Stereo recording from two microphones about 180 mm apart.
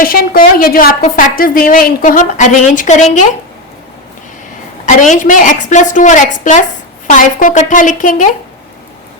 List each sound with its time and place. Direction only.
0.0 s a woman's voice: 55° left (ahead or behind)
4.9 s a woman's voice: 45° left (ahead or behind)